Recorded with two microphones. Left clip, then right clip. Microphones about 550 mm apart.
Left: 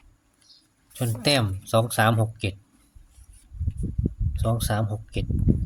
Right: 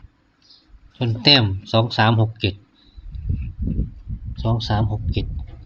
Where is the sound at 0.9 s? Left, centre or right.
Left.